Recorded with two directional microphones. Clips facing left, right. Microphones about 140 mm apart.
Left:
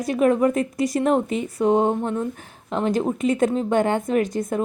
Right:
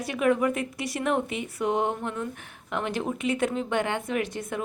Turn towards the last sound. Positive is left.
turn(degrees=40)  # may be behind; listen again after turning